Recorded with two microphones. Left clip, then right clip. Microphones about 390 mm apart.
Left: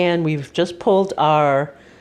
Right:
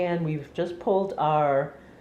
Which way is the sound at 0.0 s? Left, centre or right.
Left.